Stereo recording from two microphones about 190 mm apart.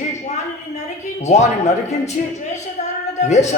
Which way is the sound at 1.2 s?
35° left (ahead or behind).